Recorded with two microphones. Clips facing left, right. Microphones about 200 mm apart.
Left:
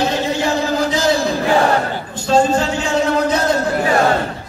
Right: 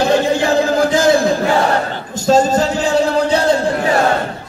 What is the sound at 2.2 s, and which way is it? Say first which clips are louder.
Music: right 2 dB; 40° right (ahead or behind).